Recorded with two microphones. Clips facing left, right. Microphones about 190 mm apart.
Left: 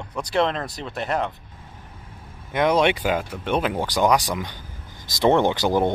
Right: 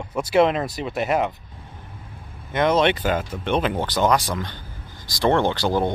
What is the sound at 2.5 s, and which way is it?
Speech, 10° left (ahead or behind).